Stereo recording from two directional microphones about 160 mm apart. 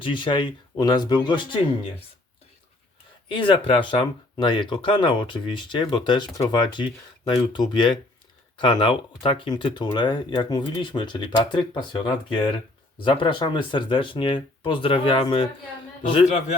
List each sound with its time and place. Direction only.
0.0 s speech: 30° left (ahead or behind)
3.2 s speech: 35° left (ahead or behind)